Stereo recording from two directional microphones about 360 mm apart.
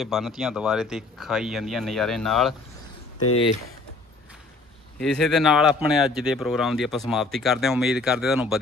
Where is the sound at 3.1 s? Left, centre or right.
Left.